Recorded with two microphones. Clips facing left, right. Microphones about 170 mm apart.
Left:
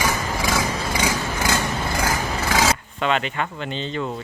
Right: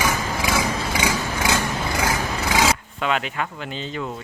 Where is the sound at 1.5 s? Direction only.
15° right (ahead or behind).